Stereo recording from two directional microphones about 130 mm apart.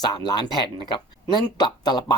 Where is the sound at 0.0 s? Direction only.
35° left (ahead or behind).